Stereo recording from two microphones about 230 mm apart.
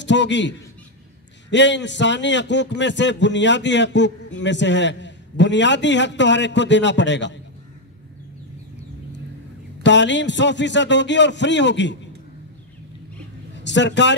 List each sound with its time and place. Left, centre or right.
0.0 s a man's voice: left
9.8 s a man's voice: left
13.7 s a man's voice: left